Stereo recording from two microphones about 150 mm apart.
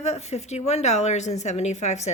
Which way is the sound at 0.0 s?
45° left (ahead or behind).